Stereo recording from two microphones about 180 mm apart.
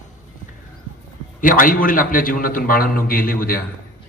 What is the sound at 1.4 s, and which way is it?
A man's voice, 50° left (ahead or behind).